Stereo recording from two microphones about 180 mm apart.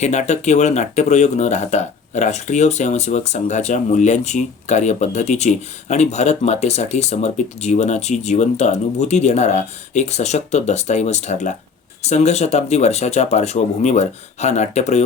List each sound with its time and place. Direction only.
0.0 s speech: 40° left (ahead or behind)